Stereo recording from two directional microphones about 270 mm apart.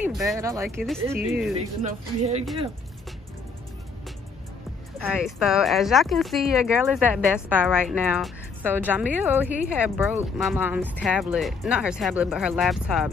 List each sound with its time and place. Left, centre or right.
0.0 s speech: centre
0.4 s speech: centre
1.8 s a woman's voice: right
4.9 s speech: centre